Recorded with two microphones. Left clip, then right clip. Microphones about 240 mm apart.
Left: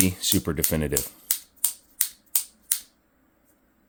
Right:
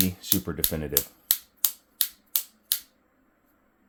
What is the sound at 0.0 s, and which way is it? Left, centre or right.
Speech, left.